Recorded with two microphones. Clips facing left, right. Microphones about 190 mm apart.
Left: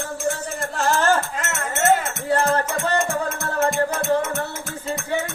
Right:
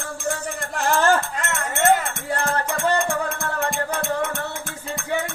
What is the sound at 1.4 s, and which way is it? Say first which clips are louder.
Music: right 1 dB; centre (ahead or behind).